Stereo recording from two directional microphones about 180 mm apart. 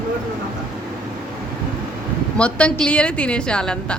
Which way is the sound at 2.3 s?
5° left (ahead or behind).